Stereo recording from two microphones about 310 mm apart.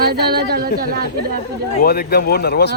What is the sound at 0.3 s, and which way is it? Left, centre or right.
Speech, right.